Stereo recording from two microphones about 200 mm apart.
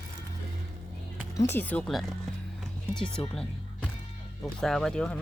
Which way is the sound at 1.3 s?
15° left (ahead or behind).